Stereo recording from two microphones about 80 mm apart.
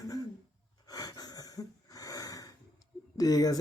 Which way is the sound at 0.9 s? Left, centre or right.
Left.